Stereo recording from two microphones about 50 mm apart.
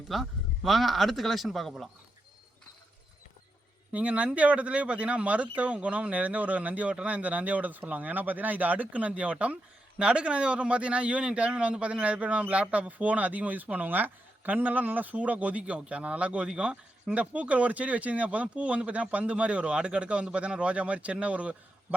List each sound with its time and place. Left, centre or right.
0.1 s speech: centre
3.9 s a man's voice: right